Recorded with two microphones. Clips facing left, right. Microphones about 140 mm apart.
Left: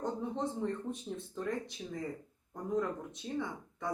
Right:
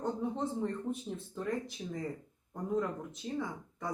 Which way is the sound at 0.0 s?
5° right (ahead or behind).